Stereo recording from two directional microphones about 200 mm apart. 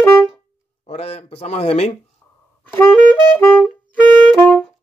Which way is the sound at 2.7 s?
10° left (ahead or behind).